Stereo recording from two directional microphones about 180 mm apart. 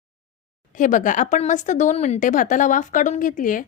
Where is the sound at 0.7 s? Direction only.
45° left (ahead or behind).